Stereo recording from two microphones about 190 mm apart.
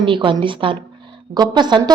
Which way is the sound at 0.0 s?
25° right (ahead or behind).